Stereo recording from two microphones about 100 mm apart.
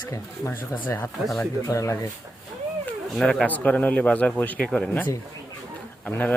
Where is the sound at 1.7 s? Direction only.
35° left (ahead or behind).